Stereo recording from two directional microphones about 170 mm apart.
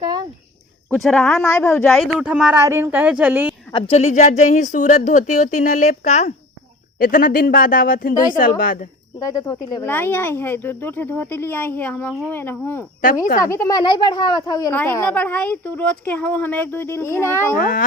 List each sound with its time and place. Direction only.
0.0 s a sound: 25° right (ahead or behind)
0.9 s speech: centre (ahead or behind)
3.7 s a woman's voice: 30° left (ahead or behind)
7.0 s speech: 55° left (ahead or behind)
9.2 s speech: 20° left (ahead or behind)
9.8 s speech: 10° left (ahead or behind)
14.7 s speech: 15° left (ahead or behind)